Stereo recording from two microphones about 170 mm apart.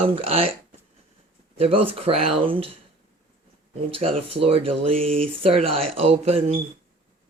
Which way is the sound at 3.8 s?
35° right (ahead or behind).